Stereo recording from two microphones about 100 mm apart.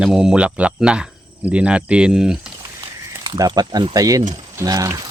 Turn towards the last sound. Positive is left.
turn(degrees=-35)  # may be behind; listen again after turning